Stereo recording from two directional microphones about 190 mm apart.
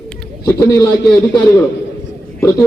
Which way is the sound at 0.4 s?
15° left (ahead or behind).